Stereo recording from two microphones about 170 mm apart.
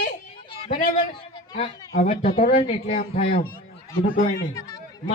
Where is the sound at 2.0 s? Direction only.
45° left (ahead or behind).